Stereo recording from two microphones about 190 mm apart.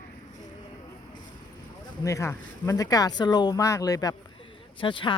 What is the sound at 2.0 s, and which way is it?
Speech, 15° left (ahead or behind).